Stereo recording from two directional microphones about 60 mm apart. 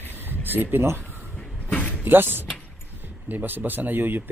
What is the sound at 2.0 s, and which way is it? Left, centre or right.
Speech, right.